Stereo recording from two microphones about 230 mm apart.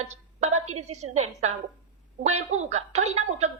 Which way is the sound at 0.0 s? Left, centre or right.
Right.